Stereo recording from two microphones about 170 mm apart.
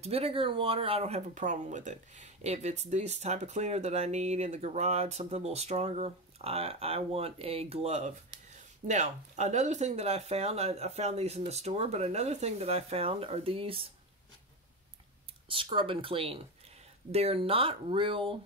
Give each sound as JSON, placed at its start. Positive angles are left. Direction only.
{"t": 0.0, "sound": "speech", "side_deg": -35}
{"t": 15.4, "sound": "speech", "side_deg": -30}